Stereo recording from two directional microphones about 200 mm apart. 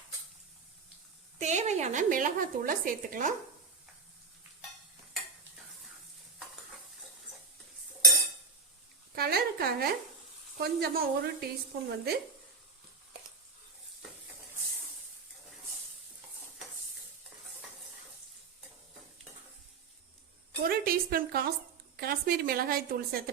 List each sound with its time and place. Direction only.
1.4 s speech: 35° right (ahead or behind)
9.1 s a sound: 50° right (ahead or behind)
10.6 s speech: 50° right (ahead or behind)
20.7 s a woman's voice: 50° right (ahead or behind)